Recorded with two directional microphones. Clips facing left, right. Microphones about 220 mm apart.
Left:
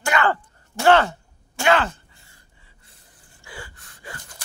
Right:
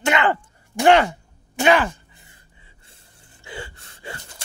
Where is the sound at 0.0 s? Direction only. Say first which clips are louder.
Right 2 dB; 20° right (ahead or behind).